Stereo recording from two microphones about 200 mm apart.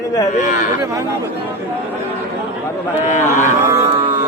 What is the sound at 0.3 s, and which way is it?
Speech, 40° left (ahead or behind).